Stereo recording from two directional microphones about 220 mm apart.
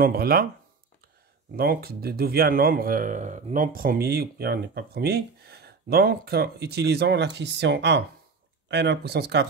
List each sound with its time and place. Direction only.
0.0 s speech: 45° right (ahead or behind)
1.6 s speech: 45° right (ahead or behind)